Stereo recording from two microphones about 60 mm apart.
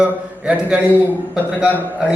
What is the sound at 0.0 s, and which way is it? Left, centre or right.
Speech, centre.